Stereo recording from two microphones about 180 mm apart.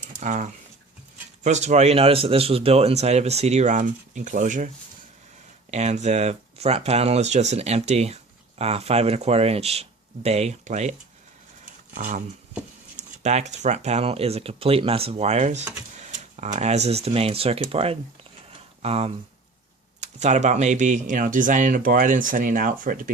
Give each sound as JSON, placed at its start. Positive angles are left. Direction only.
{"t": 0.2, "sound": "speech", "side_deg": -40}
{"t": 5.7, "sound": "speech", "side_deg": -40}
{"t": 11.6, "sound": "a sound", "side_deg": -45}
{"t": 13.0, "sound": "speech", "side_deg": -40}